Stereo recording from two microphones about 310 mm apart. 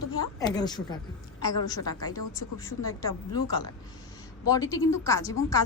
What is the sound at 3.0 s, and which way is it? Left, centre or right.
Speech, centre.